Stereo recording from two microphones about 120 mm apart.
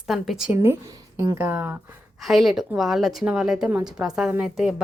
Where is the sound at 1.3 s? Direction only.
15° right (ahead or behind).